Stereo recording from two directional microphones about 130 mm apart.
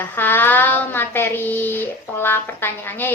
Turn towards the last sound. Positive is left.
turn(degrees=15)  # may be behind; listen again after turning